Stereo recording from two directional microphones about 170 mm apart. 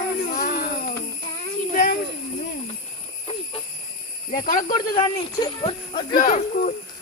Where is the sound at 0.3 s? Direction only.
55° left (ahead or behind).